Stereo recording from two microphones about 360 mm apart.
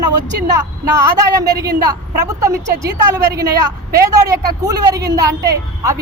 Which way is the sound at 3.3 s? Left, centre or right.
Centre.